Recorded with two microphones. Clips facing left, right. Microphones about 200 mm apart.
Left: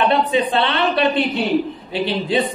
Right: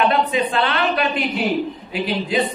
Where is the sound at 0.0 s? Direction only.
30° left (ahead or behind).